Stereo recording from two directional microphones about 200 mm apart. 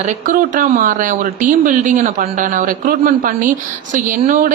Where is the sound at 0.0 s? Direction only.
40° right (ahead or behind).